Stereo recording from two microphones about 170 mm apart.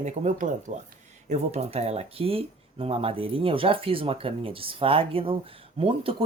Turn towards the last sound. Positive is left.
turn(degrees=-35)  # may be behind; listen again after turning